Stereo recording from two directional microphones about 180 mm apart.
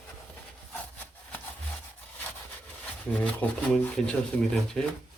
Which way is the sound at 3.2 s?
5° left (ahead or behind).